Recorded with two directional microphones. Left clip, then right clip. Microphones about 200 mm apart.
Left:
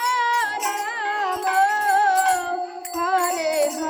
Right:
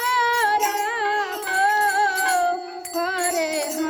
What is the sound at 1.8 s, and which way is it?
Music, 30° right (ahead or behind).